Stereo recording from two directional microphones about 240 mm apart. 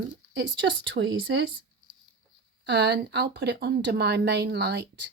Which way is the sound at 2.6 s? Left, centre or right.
Right.